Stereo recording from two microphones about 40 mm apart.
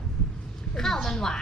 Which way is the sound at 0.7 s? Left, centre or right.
Centre.